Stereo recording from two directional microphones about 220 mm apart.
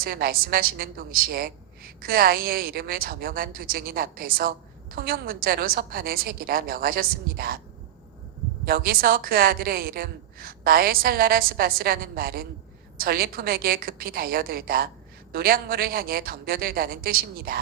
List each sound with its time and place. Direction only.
0.0 s a woman's voice: 40° right (ahead or behind)
8.6 s a woman's voice: 40° right (ahead or behind)